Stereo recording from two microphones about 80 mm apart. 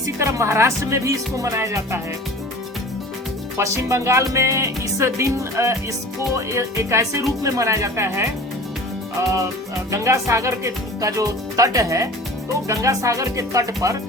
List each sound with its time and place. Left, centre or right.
0.0 s music: right
3.6 s music: right
9.9 s speech: right
12.6 s music: right